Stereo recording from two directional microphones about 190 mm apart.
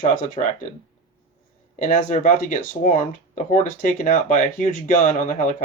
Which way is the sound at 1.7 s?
45° left (ahead or behind).